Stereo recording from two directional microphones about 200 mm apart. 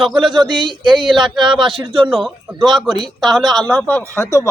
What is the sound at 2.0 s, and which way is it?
Speech, centre (ahead or behind).